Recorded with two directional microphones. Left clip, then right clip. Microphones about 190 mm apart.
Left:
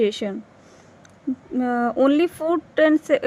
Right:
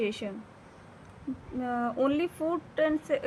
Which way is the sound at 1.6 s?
40° left (ahead or behind).